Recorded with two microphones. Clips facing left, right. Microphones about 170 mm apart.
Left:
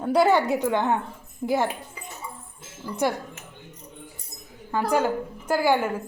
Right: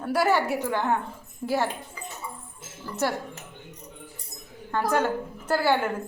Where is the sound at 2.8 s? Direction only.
15° left (ahead or behind).